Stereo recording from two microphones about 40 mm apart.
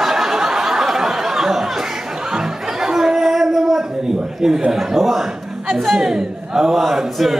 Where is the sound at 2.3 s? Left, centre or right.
Centre.